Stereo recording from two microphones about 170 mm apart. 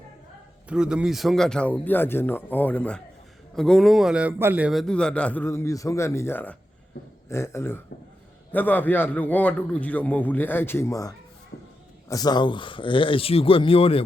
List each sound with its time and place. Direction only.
0.7 s a man's voice: 5° right (ahead or behind); by 11.1 s 20° left (ahead or behind)
11.5 s a sound: 65° left (ahead or behind)
12.0 s speech: 20° left (ahead or behind)